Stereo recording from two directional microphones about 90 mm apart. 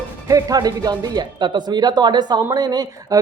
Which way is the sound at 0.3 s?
40° right (ahead or behind).